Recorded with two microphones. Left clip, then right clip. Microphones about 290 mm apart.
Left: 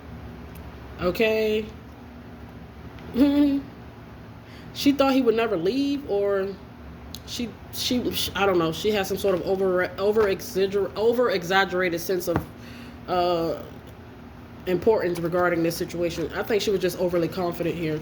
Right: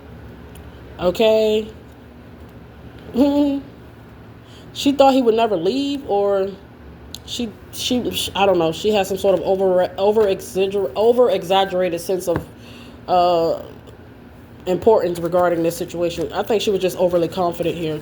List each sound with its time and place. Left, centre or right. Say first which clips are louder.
0.9 s speech: right 7 dB; right
3.2 s speech: right 4 dB; right
4.8 s speech: right 7 dB; right
5.7 s a sound: right 3 dB; centre
6.1 s a woman's voice: right 8 dB; right
14.6 s speech: right 6 dB; right